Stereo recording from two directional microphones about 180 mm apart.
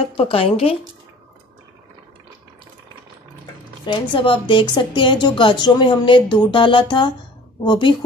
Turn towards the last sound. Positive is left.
turn(degrees=25)  # may be behind; listen again after turning